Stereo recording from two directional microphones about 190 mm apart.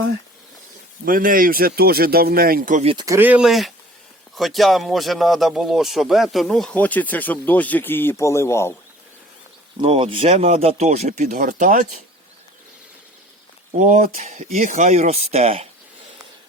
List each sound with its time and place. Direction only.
1.0 s speech: 45° right (ahead or behind)
2.8 s speech: 25° right (ahead or behind)
3.1 s speech: 10° right (ahead or behind); by 8.7 s 15° left (ahead or behind)
9.7 s speech: 25° right (ahead or behind)
13.7 s speech: 40° right (ahead or behind)